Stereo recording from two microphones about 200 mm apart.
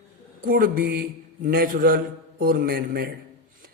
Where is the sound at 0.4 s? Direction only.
45° right (ahead or behind).